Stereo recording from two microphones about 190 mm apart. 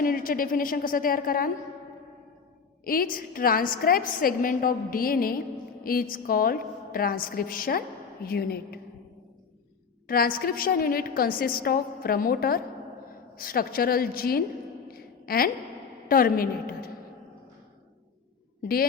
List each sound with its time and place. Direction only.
0.0 s a woman's voice: 50° left (ahead or behind)
2.8 s a woman's voice: 50° left (ahead or behind)
10.1 s a woman's voice: 50° left (ahead or behind)
14.8 s a sound: 50° left (ahead or behind)
16.0 s a woman's voice: 50° left (ahead or behind)
18.6 s a woman's voice: 50° left (ahead or behind)